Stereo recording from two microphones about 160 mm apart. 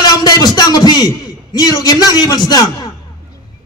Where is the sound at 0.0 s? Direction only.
25° left (ahead or behind).